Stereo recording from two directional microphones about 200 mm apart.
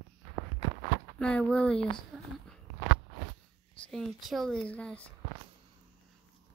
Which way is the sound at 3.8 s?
Centre (ahead or behind).